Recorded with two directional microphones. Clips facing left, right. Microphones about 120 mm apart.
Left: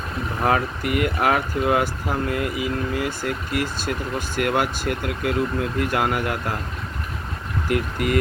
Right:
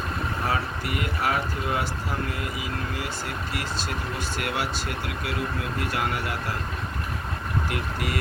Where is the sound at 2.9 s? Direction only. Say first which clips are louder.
Left 6 dB; 50° left (ahead or behind).